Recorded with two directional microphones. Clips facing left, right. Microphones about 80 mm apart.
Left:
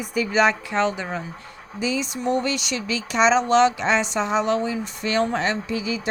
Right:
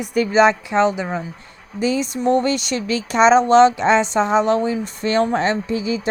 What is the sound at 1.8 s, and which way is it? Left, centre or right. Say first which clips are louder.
Speech: right 5 dB; right.